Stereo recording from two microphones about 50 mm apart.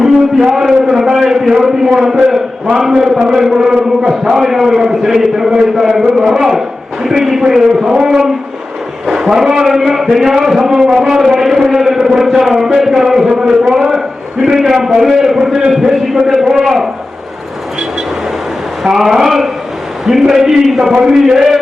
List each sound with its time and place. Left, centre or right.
0.0 s a man's voice: centre
18.8 s a man's voice: centre